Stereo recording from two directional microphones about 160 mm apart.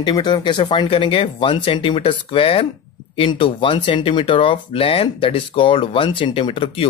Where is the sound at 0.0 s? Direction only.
30° left (ahead or behind).